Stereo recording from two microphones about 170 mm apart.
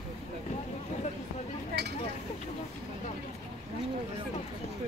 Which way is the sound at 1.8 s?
75° right (ahead or behind).